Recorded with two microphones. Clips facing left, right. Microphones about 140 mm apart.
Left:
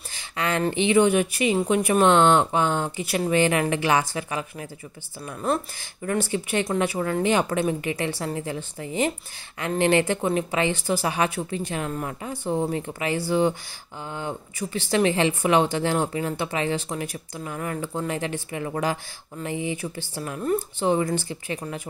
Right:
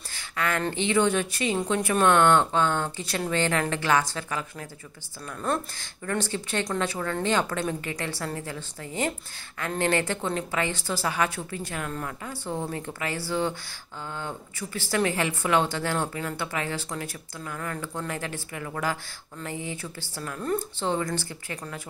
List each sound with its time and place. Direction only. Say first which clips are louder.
0.1 s a woman's voice: left 2 dB; 20° left (ahead or behind)
6.0 s a woman's voice: left 4 dB; 15° left (ahead or behind)